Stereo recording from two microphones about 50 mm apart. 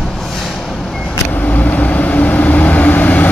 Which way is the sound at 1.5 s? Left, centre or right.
Left.